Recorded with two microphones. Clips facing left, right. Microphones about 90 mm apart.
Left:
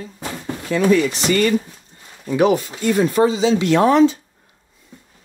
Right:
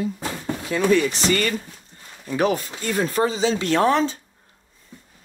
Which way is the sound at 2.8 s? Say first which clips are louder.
Left 6 dB; 40° left (ahead or behind).